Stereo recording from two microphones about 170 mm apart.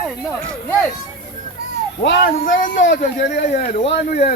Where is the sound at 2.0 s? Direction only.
90° left.